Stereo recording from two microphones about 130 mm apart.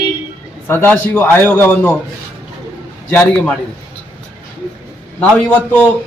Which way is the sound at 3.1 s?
15° left (ahead or behind).